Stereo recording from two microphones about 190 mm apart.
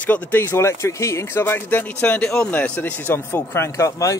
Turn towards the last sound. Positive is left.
turn(degrees=15)  # may be behind; listen again after turning